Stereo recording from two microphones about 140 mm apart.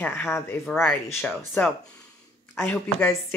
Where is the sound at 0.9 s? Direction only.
15° left (ahead or behind).